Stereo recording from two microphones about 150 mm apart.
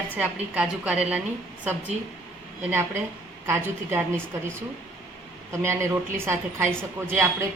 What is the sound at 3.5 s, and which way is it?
A woman's voice, 15° right (ahead or behind).